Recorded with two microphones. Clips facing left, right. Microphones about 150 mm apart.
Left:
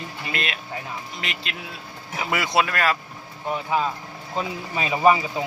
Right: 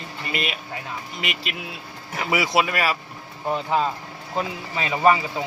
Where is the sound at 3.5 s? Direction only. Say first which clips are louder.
Right 2 dB; 20° right (ahead or behind).